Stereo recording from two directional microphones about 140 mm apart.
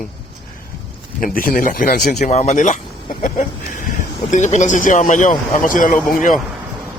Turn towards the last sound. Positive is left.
turn(degrees=70)  # may be behind; listen again after turning